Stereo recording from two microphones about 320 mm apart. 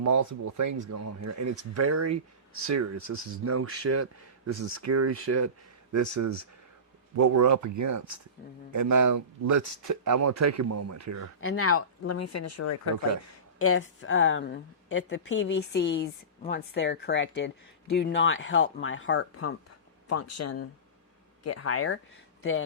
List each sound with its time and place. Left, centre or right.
0.0 s speech: right
5.9 s speech: right
11.3 s speech: left
20.1 s speech: left